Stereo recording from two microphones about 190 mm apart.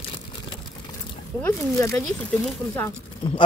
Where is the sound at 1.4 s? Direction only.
10° left (ahead or behind).